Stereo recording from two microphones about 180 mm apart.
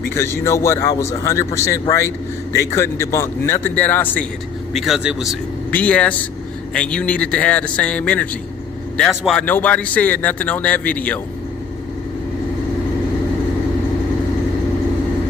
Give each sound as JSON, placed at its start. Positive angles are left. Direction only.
{"t": 0.1, "sound": "a man's voice", "side_deg": 15}
{"t": 4.7, "sound": "speech", "side_deg": 0}
{"t": 5.7, "sound": "a man's voice", "side_deg": 10}